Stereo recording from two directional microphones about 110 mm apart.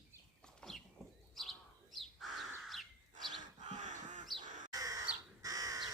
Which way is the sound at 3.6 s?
90° right.